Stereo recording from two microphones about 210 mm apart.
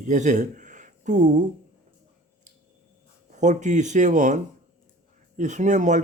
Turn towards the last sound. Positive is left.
turn(degrees=-35)  # may be behind; listen again after turning